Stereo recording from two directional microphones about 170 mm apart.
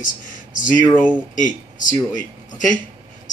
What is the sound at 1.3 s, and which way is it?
Speech, 50° left (ahead or behind).